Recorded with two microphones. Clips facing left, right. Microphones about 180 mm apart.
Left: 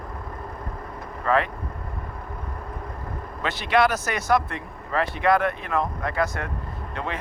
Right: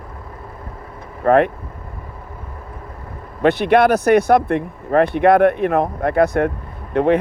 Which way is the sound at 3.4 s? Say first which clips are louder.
Right 8 dB; 60° right (ahead or behind).